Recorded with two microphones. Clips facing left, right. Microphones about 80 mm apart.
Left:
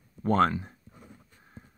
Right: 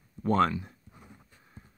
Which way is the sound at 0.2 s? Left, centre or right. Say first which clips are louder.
Left 1 dB; left.